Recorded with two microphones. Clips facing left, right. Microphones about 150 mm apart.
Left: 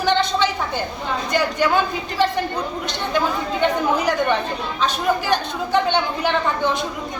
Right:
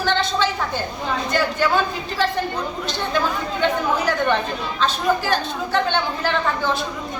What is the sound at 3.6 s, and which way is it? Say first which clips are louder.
Speech: left 1 dB; 15° left (ahead or behind).